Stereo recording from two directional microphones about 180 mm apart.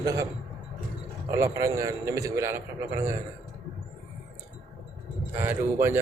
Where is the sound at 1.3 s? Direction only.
15° right (ahead or behind).